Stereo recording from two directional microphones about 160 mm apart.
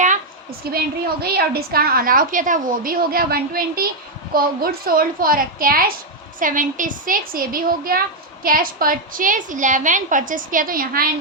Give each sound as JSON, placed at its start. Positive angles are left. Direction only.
{"t": 0.6, "sound": "a woman's voice", "side_deg": -75}